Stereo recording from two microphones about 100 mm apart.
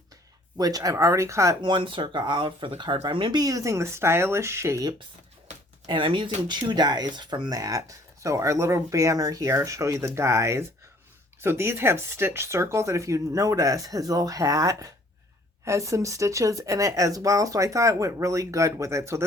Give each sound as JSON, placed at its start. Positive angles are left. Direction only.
{"t": 0.5, "sound": "speech", "side_deg": -40}
{"t": 1.6, "sound": "speech", "side_deg": -55}
{"t": 3.3, "sound": "speech", "side_deg": -35}
{"t": 5.8, "sound": "speech", "side_deg": -55}